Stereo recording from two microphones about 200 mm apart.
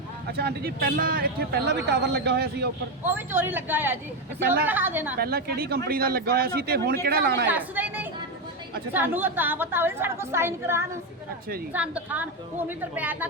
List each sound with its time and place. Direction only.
0.3 s a man's voice: 55° right (ahead or behind)
3.2 s a woman's voice: 10° right (ahead or behind)
5.2 s a man's voice: 50° right (ahead or behind)
7.4 s a woman's voice: 10° right (ahead or behind)